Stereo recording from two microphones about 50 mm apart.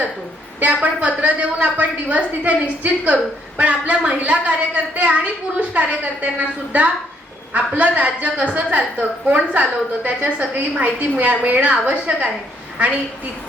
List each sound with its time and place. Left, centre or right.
0.6 s a woman's voice: right
7.8 s a woman's voice: right